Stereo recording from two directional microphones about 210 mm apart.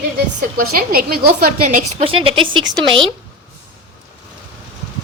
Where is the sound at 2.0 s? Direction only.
25° right (ahead or behind).